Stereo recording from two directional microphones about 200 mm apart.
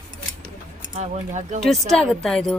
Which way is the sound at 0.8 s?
35° right (ahead or behind).